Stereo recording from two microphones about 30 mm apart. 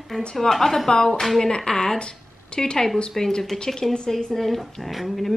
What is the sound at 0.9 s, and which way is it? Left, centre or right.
A woman's voice, left.